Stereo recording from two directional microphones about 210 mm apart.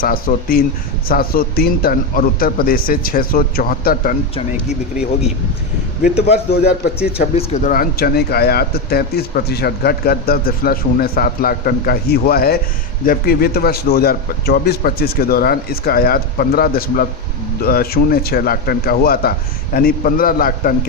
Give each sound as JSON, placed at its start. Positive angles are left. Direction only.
{"t": 0.0, "sound": "speech", "side_deg": 45}
{"t": 6.6, "sound": "speech", "side_deg": 50}
{"t": 7.3, "sound": "speech", "side_deg": 35}